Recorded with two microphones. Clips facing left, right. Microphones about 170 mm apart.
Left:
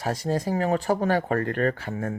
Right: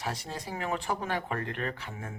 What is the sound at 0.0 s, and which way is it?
Speech, 45° left (ahead or behind).